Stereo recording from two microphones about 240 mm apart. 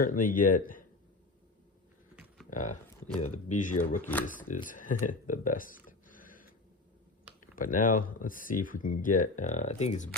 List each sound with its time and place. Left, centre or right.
0.0 s speech: left
2.5 s speech: left
7.5 s speech: left